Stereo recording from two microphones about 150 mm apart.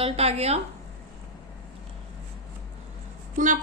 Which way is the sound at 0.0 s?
45° right (ahead or behind).